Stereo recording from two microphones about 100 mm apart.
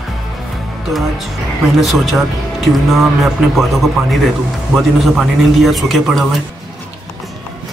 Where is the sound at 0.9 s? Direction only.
Centre (ahead or behind).